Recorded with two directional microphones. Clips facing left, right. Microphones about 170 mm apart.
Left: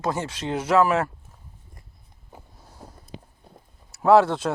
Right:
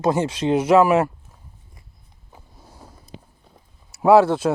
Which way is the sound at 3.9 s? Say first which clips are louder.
Right 3 dB; 10° right (ahead or behind).